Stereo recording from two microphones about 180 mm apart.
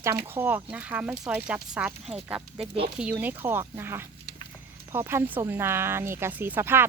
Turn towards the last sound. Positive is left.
turn(degrees=-10)  # may be behind; listen again after turning